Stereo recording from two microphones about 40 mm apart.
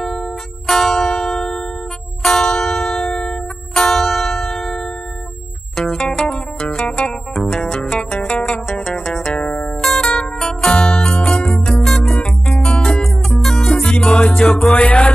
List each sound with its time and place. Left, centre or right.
0.0 s music: centre
7.3 s music: centre
9.3 s music: left
9.8 s zither: centre
10.4 s music: centre
11.8 s music: centre
12.5 s music: left
14.5 s music: left